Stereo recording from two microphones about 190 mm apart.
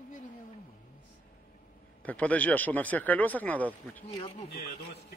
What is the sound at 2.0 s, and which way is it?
Speech, 5° left (ahead or behind).